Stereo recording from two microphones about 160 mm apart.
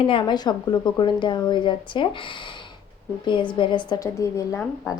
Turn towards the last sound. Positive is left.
turn(degrees=20)  # may be behind; listen again after turning